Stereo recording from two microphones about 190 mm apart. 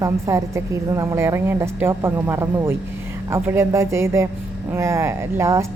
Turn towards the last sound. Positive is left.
turn(degrees=-15)  # may be behind; listen again after turning